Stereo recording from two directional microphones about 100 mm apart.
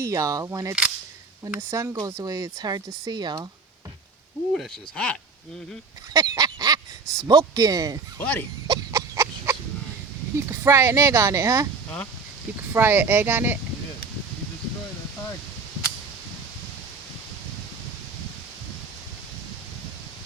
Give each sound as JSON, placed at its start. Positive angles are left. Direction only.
{"t": 0.0, "sound": "speech", "side_deg": -35}
{"t": 4.5, "sound": "speech", "side_deg": 5}
{"t": 6.1, "sound": "speech", "side_deg": -40}
{"t": 7.0, "sound": "speech", "side_deg": 5}
{"t": 7.3, "sound": "speech", "side_deg": -35}
{"t": 8.2, "sound": "speech", "side_deg": 15}
{"t": 8.6, "sound": "a sound", "side_deg": -35}
{"t": 10.5, "sound": "speech", "side_deg": -25}
{"t": 12.7, "sound": "speech", "side_deg": -20}